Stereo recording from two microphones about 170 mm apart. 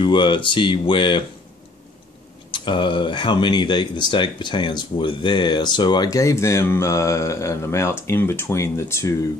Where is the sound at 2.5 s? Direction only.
30° left (ahead or behind).